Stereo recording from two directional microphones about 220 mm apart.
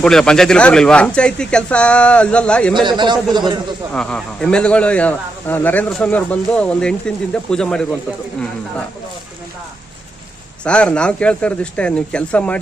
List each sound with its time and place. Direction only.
0.0 s speech: 5° left (ahead or behind)
2.7 s speech: 20° right (ahead or behind)
3.9 s speech: 5° left (ahead or behind)
10.6 s speech: 5° left (ahead or behind)